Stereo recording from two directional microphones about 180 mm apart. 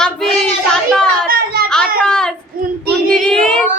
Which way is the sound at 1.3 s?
60° right (ahead or behind).